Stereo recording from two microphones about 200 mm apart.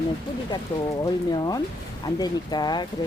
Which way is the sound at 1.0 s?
20° left (ahead or behind).